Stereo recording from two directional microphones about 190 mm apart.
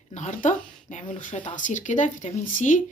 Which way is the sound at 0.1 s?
40° left (ahead or behind).